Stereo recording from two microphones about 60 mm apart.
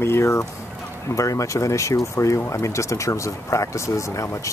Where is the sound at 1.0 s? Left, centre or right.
Left.